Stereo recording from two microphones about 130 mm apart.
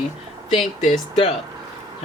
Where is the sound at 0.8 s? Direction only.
60° left (ahead or behind).